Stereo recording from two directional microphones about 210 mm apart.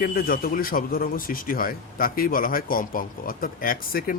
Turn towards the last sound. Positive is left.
turn(degrees=45)  # may be behind; listen again after turning